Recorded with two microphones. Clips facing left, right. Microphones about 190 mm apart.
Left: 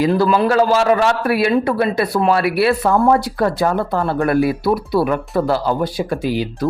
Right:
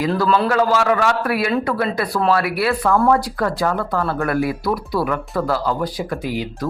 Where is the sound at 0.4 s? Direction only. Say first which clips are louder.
Left 3 dB; 30° left (ahead or behind).